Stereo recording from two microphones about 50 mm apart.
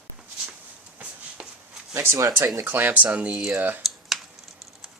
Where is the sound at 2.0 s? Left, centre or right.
Right.